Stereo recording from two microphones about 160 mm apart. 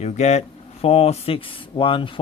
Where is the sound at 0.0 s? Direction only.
45° left (ahead or behind).